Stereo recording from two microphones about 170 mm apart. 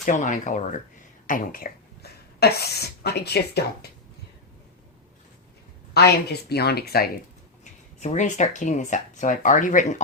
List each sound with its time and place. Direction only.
0.0 s speech: 45° left (ahead or behind); by 3.8 s 70° left (ahead or behind)
5.9 s speech: 70° left (ahead or behind)
7.6 s speech: 45° left (ahead or behind)